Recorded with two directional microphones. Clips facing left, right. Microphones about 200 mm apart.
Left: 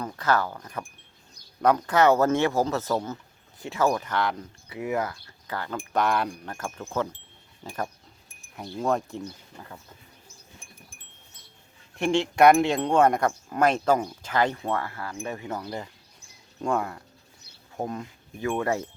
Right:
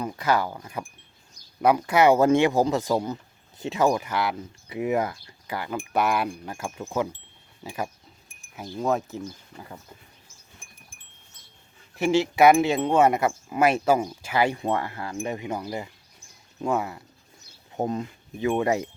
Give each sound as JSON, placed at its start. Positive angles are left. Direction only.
{"t": 0.0, "sound": "speech", "side_deg": -10}
{"t": 4.7, "sound": "speech", "side_deg": -20}
{"t": 11.9, "sound": "speech", "side_deg": -5}
{"t": 17.7, "sound": "speech", "side_deg": -20}